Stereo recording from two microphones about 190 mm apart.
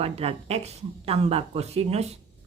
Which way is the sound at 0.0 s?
30° right (ahead or behind).